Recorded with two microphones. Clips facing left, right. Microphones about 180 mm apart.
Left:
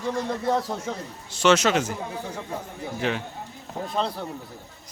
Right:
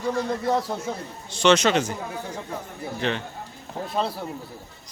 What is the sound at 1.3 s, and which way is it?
Speech, 5° left (ahead or behind).